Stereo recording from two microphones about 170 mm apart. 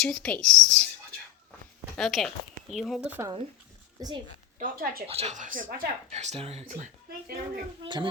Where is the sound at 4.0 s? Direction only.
20° right (ahead or behind).